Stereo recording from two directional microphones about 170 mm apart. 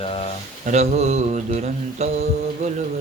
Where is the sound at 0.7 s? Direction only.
40° right (ahead or behind).